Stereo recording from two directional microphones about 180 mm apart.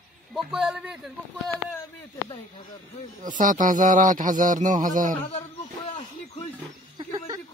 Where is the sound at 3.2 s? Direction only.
45° right (ahead or behind).